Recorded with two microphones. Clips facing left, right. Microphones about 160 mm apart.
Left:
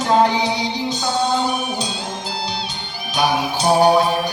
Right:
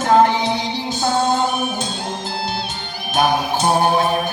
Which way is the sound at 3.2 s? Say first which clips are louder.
Right 2 dB; 50° right (ahead or behind).